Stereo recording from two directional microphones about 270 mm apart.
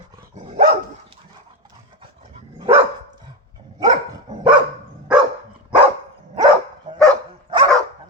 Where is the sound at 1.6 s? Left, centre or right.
Centre.